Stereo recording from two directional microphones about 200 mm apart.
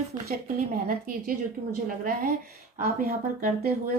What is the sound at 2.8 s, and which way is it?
Speech, 50° right (ahead or behind).